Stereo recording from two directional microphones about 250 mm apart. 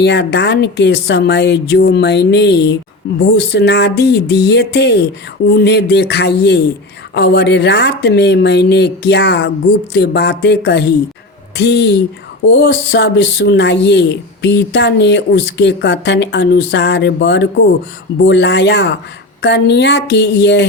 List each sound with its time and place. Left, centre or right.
0.0 s speech: left